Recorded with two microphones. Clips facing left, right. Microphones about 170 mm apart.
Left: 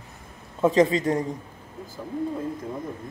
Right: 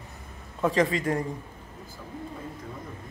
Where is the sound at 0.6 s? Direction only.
25° left (ahead or behind).